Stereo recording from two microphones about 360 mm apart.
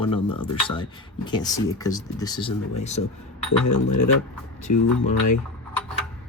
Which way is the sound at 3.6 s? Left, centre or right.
Left.